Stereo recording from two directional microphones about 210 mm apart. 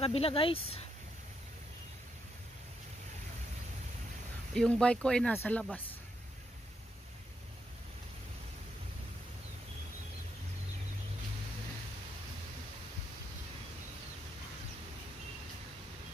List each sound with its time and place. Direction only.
0.0 s speech: 25° left (ahead or behind)
4.6 s speech: 5° left (ahead or behind)